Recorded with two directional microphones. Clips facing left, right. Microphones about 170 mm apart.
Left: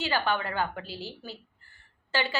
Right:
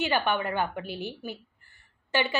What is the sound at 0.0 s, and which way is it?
A woman's voice, 20° right (ahead or behind).